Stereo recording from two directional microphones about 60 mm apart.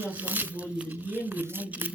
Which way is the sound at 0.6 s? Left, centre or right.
Centre.